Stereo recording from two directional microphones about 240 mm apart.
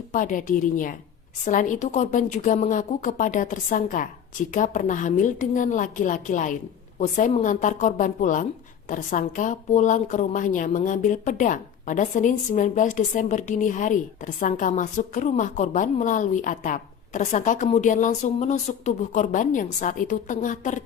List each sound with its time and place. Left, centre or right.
0.1 s a woman's voice: left